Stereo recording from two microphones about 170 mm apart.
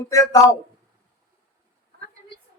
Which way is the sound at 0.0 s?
20° left (ahead or behind).